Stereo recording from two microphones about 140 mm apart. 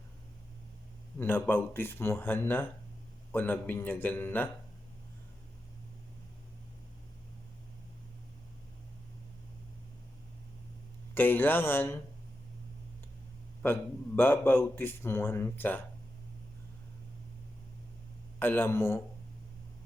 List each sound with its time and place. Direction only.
1.2 s speech: 15° left (ahead or behind)
11.1 s speech: 15° left (ahead or behind)
14.2 s speech: 15° left (ahead or behind)
18.3 s speech: 15° left (ahead or behind)